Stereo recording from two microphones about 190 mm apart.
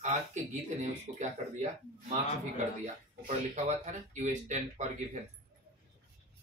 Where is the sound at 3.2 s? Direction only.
40° right (ahead or behind).